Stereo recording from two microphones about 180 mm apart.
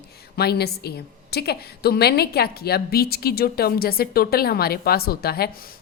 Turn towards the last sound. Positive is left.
turn(degrees=55)  # may be behind; listen again after turning